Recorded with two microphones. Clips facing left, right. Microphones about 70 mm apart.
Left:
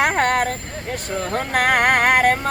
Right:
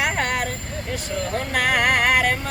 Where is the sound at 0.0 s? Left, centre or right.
Left.